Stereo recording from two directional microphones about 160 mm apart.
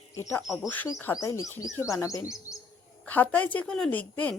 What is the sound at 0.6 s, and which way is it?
A woman's voice, 10° left (ahead or behind).